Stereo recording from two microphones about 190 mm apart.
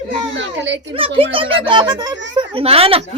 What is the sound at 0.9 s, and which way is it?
Speech, 30° right (ahead or behind).